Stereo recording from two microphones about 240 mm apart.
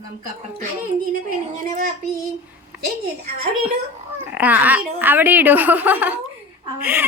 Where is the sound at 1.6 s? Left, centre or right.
Right.